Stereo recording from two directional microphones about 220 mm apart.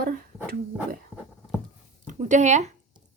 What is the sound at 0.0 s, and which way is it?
Speech, 40° right (ahead or behind).